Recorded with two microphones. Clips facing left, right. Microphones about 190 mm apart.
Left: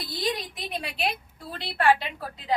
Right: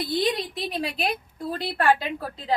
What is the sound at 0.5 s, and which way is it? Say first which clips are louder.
A woman's voice: right 5 dB; 35° right (ahead or behind).